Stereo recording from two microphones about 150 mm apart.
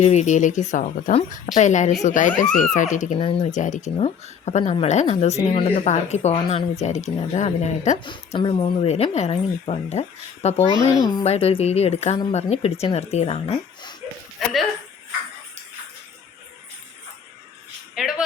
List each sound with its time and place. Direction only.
0.0 s a woman's voice: 50° left (ahead or behind)
3.2 s speech: 40° left (ahead or behind)
3.5 s a woman's voice: 55° left (ahead or behind)
8.3 s speech: 35° left (ahead or behind)
8.9 s a woman's voice: 45° left (ahead or behind)
14.4 s speech: centre (ahead or behind)
18.0 s speech: 5° right (ahead or behind)